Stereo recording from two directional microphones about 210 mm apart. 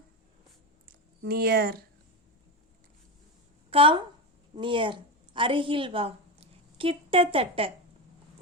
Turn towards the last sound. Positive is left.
turn(degrees=-25)  # may be behind; listen again after turning